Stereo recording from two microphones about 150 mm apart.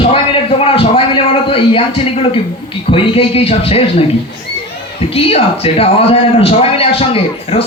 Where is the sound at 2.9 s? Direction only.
40° left (ahead or behind).